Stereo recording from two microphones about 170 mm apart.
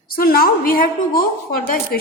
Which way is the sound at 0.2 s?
60° left (ahead or behind).